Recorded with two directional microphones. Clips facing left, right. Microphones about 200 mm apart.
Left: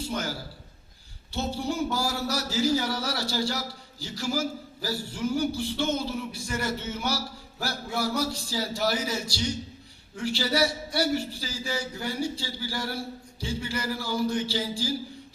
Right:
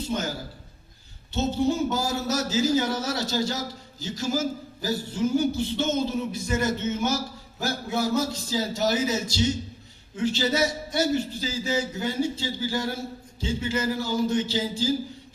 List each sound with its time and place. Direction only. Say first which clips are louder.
0.0 s a man's voice: right 3 dB; 20° right (ahead or behind)